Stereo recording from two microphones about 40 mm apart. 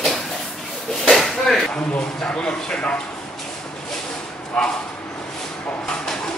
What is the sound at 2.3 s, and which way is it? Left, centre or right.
Speech, centre.